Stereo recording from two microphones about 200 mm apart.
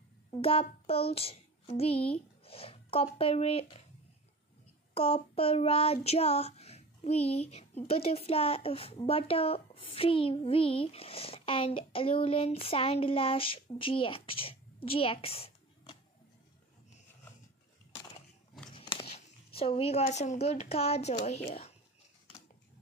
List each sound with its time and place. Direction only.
0.4 s child singing: 30° left (ahead or behind)
0.8 s a child's voice: 30° left (ahead or behind)
4.9 s child singing: 25° left (ahead or behind)
18.8 s biting: 25° left (ahead or behind)
19.1 s speech: 30° left (ahead or behind)